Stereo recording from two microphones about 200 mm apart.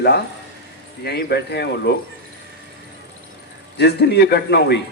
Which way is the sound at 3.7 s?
55° left (ahead or behind).